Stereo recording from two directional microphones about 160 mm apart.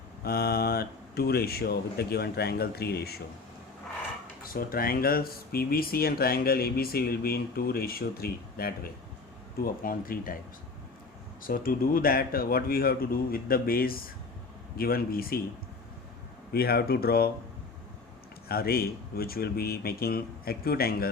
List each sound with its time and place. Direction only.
0.3 s speech: 75° left (ahead or behind)
4.4 s speech: 65° left (ahead or behind)
11.4 s speech: 65° left (ahead or behind)
16.5 s speech: 75° left (ahead or behind)
18.4 s speech: 75° left (ahead or behind)